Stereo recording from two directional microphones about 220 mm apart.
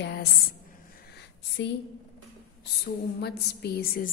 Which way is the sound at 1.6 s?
55° left (ahead or behind).